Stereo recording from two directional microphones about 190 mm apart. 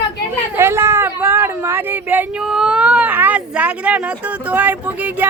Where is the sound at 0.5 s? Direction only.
15° right (ahead or behind).